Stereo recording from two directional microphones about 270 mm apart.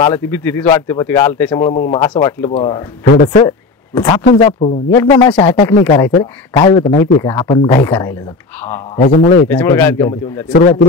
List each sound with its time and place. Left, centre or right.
0.0 s a man's voice: centre
9.0 s a man's voice: left
9.5 s a man's voice: centre
10.5 s speech: left